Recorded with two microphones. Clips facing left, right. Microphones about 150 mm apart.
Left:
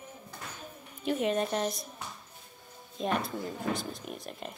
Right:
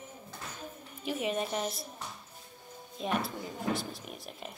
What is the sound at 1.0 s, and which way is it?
Speech, 5° right (ahead or behind).